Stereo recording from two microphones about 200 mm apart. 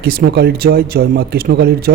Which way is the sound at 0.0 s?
50° right (ahead or behind).